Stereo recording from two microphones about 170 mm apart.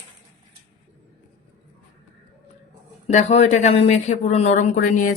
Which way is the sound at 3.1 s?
40° left (ahead or behind).